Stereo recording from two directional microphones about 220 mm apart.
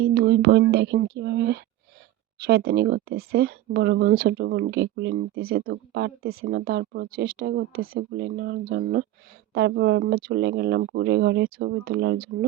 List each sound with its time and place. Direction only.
0.0 s speech: 45° right (ahead or behind)